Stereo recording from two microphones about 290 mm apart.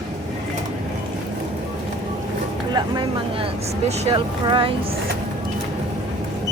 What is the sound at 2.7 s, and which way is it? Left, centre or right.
Speech, centre.